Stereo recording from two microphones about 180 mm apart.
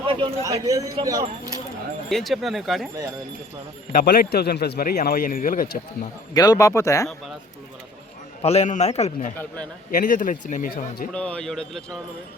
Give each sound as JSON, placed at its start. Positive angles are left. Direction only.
{"t": 0.0, "sound": "a man's voice", "side_deg": -30}
{"t": 0.4, "sound": "speech", "side_deg": -20}
{"t": 2.0, "sound": "speech", "side_deg": 0}
{"t": 4.0, "sound": "a man's voice", "side_deg": 60}
{"t": 6.3, "sound": "speech", "side_deg": 20}
{"t": 8.4, "sound": "a man's voice", "side_deg": 35}
{"t": 9.9, "sound": "speech", "side_deg": 50}
{"t": 11.1, "sound": "speech", "side_deg": 5}